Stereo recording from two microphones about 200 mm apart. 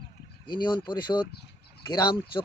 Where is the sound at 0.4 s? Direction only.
20° left (ahead or behind).